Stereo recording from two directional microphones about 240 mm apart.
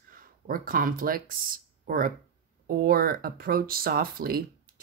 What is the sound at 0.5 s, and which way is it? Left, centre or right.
Speech, right.